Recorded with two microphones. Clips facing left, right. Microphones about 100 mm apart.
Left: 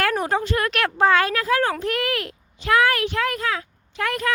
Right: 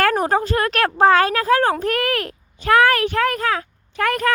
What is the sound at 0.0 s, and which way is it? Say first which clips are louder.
Speech: right 4 dB; 45° right (ahead or behind).